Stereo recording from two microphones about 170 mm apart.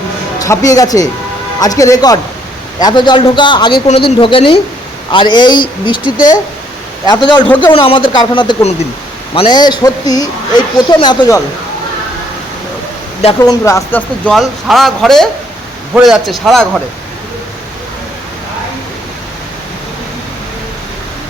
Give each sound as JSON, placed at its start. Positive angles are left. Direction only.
{"t": 0.3, "sound": "a woman's voice", "side_deg": 20}
{"t": 7.1, "sound": "a woman's voice", "side_deg": 25}
{"t": 7.4, "sound": "a man's voice", "side_deg": 10}
{"t": 7.7, "sound": "a woman's voice", "side_deg": 30}
{"t": 13.4, "sound": "a woman's voice", "side_deg": 20}
{"t": 14.3, "sound": "speech", "side_deg": 0}